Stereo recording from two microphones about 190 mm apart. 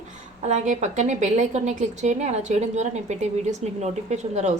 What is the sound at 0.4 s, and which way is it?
A woman's voice, 40° right (ahead or behind).